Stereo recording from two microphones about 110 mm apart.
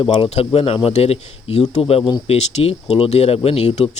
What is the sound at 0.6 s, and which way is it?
Speech, 60° left (ahead or behind).